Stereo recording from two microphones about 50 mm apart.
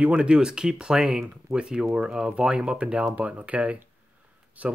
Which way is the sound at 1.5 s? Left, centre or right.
Centre.